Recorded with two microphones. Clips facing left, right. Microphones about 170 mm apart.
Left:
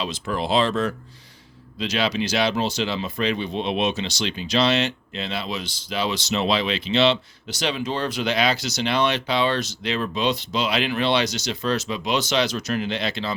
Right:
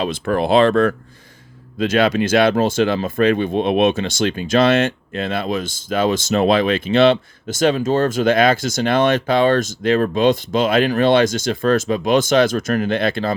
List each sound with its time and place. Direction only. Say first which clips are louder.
0.0 s speech: right 7 dB; 55° right (ahead or behind)